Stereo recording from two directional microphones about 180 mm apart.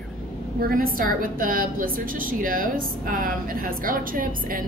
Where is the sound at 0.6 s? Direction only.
50° right (ahead or behind).